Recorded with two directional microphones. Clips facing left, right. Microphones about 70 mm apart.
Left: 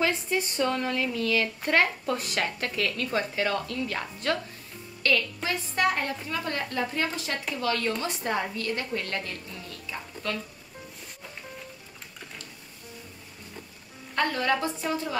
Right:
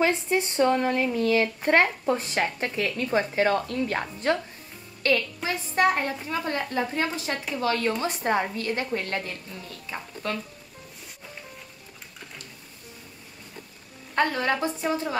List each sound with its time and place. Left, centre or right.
0.0 s speech: right
14.1 s speech: right